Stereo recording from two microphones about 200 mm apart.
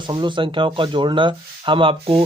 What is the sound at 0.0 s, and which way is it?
Speech, 25° right (ahead or behind).